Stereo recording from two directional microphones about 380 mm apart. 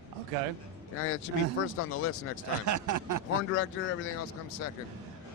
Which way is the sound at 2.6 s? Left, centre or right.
Right.